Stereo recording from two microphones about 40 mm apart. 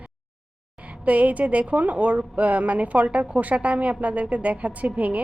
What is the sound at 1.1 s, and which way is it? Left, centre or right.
A woman's voice, right.